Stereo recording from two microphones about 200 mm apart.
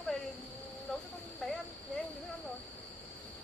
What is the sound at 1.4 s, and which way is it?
Speech, 5° left (ahead or behind).